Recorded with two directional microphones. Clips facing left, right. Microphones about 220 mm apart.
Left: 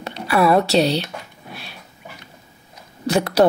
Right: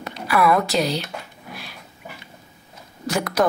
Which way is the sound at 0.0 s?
30° left (ahead or behind).